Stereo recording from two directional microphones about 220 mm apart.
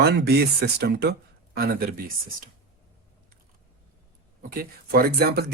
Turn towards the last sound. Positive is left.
turn(degrees=-45)  # may be behind; listen again after turning